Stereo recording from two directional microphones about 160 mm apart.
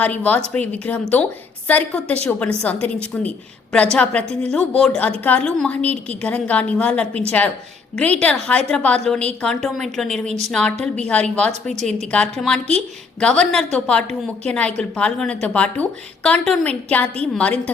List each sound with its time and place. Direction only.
0.0 s a woman's voice: 10° left (ahead or behind)
10.2 s a woman's voice: 45° right (ahead or behind)
10.5 s a woman's voice: 5° left (ahead or behind)